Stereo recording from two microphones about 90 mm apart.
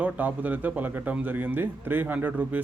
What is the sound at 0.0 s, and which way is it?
Speech, 20° right (ahead or behind).